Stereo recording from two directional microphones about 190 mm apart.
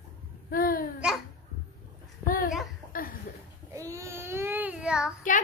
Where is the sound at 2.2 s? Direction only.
45° left (ahead or behind).